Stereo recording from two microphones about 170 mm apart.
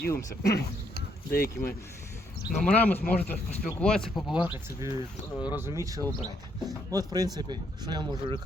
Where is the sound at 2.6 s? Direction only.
10° left (ahead or behind).